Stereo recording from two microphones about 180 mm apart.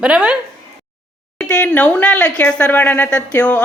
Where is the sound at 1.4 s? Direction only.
5° left (ahead or behind).